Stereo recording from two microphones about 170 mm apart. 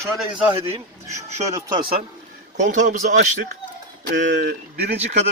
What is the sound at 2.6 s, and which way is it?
Speech, 45° right (ahead or behind).